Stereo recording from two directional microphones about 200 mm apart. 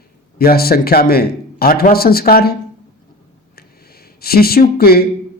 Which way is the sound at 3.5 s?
50° left (ahead or behind).